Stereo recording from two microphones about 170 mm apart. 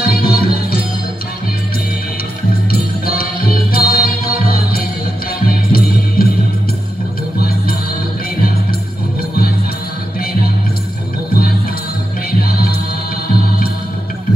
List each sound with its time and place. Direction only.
0.0 s music: 65° left (ahead or behind)
2.7 s music: 60° left (ahead or behind)
5.5 s music: 60° left (ahead or behind)